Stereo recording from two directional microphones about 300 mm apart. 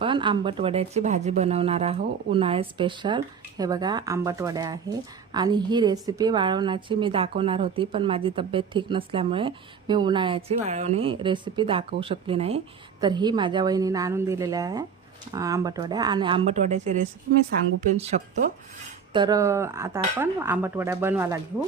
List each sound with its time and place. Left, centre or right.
0.0 s speech: centre
19.1 s speech: centre